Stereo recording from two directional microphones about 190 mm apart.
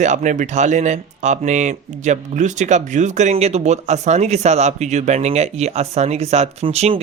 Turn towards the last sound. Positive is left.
turn(degrees=-35)  # may be behind; listen again after turning